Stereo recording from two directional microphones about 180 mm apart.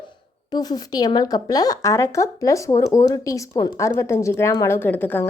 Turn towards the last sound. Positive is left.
turn(degrees=10)  # may be behind; listen again after turning